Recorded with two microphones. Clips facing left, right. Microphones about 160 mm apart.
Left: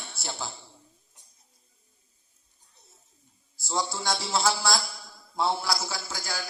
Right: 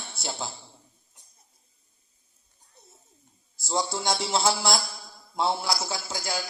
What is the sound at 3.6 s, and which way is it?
Speech, 20° right (ahead or behind).